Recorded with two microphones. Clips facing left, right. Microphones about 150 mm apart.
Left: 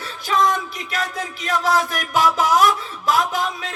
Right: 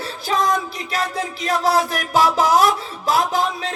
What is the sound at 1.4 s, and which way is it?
Speech, 35° right (ahead or behind).